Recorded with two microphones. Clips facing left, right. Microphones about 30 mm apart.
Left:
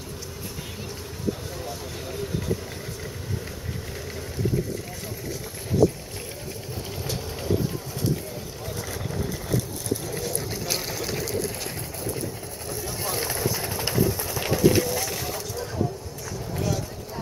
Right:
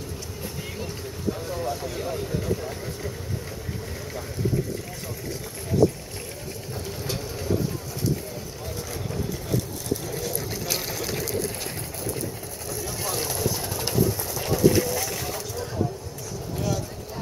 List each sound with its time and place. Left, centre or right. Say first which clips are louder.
10.0 s boat: even; centre
12.0 s vehicle: even; centre
13.5 s a sound: left 1 dB; centre
14.1 s vehicle: left 1 dB; centre
14.8 s vehicle: even; centre
16.5 s a sound: even; centre